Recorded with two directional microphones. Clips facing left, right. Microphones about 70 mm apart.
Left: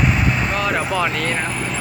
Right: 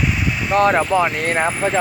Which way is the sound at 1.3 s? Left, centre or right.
Right.